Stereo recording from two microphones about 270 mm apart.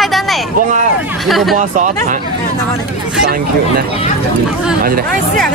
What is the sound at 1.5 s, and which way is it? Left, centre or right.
Speech, right.